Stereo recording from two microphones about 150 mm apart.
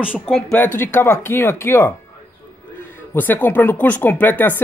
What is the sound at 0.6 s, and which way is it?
Speech, 15° left (ahead or behind).